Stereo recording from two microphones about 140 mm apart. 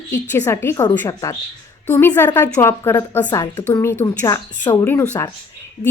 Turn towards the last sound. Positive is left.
turn(degrees=15)  # may be behind; listen again after turning